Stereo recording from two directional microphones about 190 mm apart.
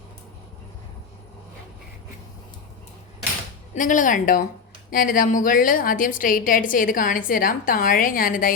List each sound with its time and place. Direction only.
3.8 s a woman's voice: 45° left (ahead or behind)